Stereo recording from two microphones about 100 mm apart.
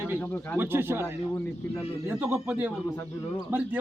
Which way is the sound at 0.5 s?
20° right (ahead or behind).